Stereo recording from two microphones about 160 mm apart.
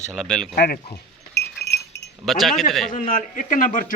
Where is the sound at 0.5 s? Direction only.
90° left.